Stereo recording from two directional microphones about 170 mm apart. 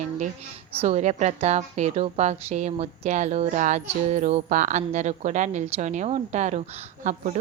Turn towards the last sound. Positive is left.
turn(degrees=-45)  # may be behind; listen again after turning